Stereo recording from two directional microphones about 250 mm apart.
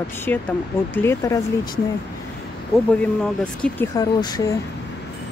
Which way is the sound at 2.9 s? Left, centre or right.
Centre.